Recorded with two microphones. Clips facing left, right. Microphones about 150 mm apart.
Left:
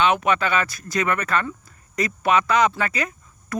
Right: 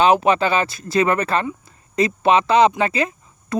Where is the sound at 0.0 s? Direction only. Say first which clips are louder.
Right 5 dB; 30° right (ahead or behind).